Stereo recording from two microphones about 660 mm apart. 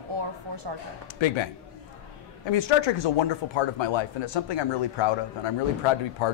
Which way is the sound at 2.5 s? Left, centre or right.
Left.